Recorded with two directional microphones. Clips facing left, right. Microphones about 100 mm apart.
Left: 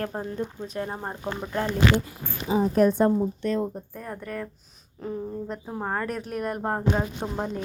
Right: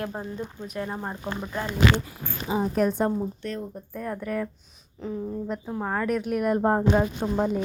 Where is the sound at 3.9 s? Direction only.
5° left (ahead or behind).